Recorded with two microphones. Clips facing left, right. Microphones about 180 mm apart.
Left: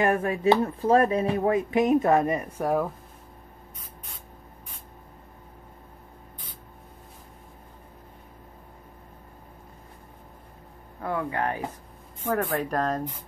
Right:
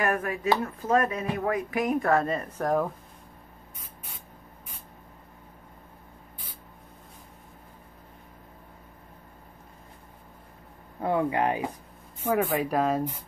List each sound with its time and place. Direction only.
0.0 s speech: 25° left (ahead or behind); by 2.9 s 10° left (ahead or behind)
11.0 s speech: 20° right (ahead or behind)